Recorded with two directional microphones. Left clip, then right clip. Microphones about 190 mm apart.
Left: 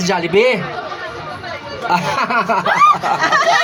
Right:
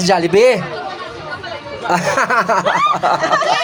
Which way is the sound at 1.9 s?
60° right (ahead or behind).